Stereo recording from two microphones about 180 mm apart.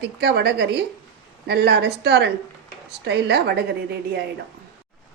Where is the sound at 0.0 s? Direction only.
65° right (ahead or behind).